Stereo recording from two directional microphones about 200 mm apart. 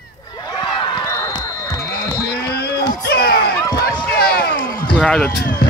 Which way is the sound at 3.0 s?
50° left (ahead or behind).